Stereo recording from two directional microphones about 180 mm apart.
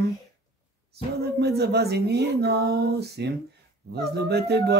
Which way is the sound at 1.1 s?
65° right (ahead or behind).